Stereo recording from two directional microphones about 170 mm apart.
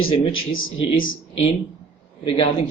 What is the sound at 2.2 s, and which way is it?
Speech, 35° left (ahead or behind).